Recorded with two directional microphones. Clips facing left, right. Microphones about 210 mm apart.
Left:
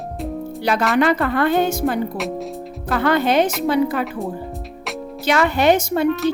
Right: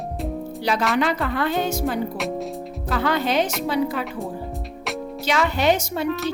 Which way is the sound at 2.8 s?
55° left (ahead or behind).